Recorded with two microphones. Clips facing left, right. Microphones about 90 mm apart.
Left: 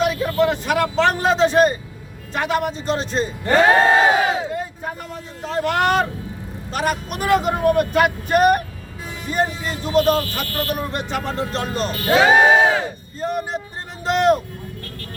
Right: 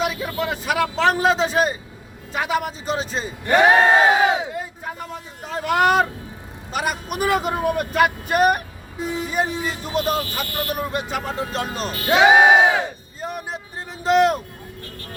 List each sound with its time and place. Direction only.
0.0 s speech: centre (ahead or behind)
3.5 s crowd: 15° right (ahead or behind)
5.5 s speech: 5° right (ahead or behind)
10.4 s crowd: 15° right (ahead or behind)
10.7 s speech: 5° right (ahead or behind)
11.9 s crowd: 15° right (ahead or behind)
13.1 s speech: 5° right (ahead or behind)